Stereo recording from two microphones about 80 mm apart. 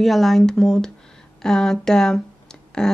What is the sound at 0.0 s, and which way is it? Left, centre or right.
Speech, centre.